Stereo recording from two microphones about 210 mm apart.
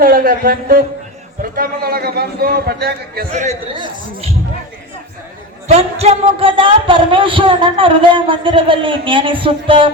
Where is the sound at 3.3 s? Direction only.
35° right (ahead or behind).